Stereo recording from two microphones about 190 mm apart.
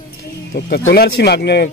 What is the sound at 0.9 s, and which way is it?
Speech, 60° left (ahead or behind).